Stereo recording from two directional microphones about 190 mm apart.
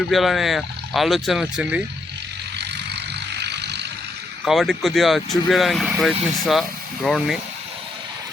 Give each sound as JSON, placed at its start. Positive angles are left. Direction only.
{"t": 0.1, "sound": "speech", "side_deg": 0}
{"t": 2.6, "sound": "vehicle", "side_deg": -60}
{"t": 4.4, "sound": "speech", "side_deg": 0}